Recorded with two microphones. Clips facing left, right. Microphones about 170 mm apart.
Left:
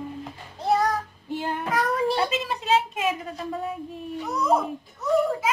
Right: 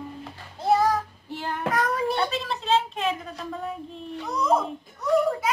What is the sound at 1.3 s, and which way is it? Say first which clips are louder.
Child singing: left 4 dB; 20° left (ahead or behind).